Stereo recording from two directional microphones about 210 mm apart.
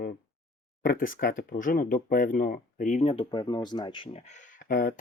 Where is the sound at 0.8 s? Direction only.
40° left (ahead or behind).